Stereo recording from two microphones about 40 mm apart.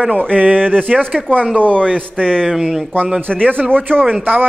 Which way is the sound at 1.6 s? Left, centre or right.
Left.